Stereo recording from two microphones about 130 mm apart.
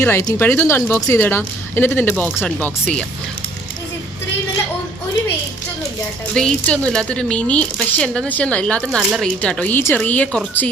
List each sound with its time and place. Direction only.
0.0 s speech: 20° left (ahead or behind)
6.3 s speech: 5° left (ahead or behind)